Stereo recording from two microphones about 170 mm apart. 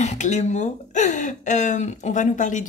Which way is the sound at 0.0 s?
40° left (ahead or behind).